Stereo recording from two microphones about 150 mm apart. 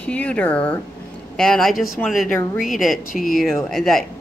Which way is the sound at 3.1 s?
65° left (ahead or behind).